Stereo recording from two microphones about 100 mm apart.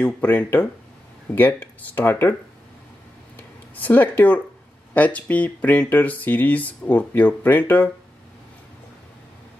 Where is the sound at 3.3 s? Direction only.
20° left (ahead or behind).